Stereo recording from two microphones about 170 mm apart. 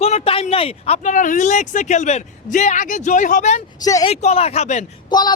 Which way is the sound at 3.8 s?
20° left (ahead or behind).